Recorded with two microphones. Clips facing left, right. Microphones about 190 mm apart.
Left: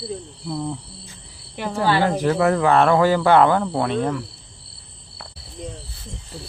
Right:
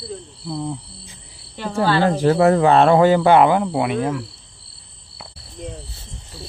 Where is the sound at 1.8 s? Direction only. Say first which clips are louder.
Right 2 dB; 15° left (ahead or behind).